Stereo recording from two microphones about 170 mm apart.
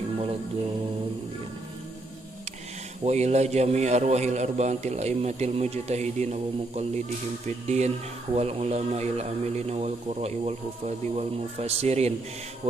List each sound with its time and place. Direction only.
3.0 s a man's voice: 40° right (ahead or behind)